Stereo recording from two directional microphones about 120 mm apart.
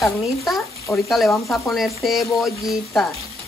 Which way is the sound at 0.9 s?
20° left (ahead or behind).